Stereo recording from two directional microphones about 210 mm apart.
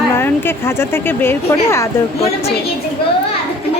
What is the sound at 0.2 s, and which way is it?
A woman's voice, 10° left (ahead or behind).